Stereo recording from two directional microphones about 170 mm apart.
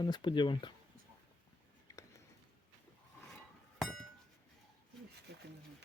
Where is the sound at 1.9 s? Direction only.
20° left (ahead or behind).